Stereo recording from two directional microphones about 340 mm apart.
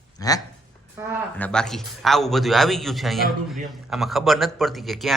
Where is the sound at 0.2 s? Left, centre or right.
Centre.